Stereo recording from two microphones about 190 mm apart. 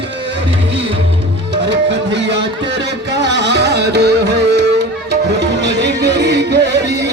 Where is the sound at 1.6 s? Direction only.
70° right (ahead or behind).